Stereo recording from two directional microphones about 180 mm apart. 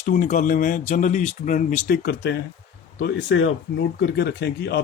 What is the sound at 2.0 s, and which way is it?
A man's voice, 70° left (ahead or behind).